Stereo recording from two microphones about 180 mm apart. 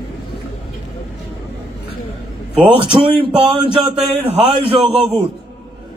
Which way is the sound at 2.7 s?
30° right (ahead or behind).